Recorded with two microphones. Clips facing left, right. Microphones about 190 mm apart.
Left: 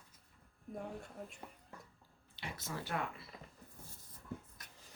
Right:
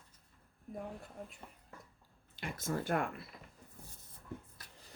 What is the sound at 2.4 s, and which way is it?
Speech, 50° right (ahead or behind).